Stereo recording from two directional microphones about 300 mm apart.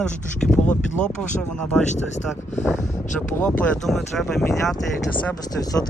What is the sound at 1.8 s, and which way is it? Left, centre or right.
Speech, left.